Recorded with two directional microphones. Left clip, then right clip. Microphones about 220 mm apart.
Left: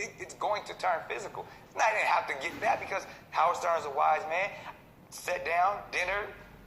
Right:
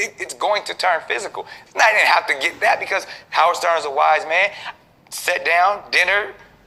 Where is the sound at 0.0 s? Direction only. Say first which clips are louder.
Right 13 dB; 45° right (ahead or behind).